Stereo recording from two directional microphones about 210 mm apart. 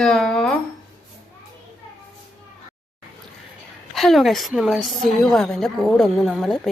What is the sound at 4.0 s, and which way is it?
A woman's voice, centre (ahead or behind).